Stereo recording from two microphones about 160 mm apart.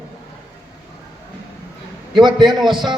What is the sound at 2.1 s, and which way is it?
Speech, 30° right (ahead or behind).